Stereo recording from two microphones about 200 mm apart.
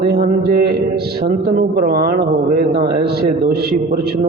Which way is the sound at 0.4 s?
50° right (ahead or behind).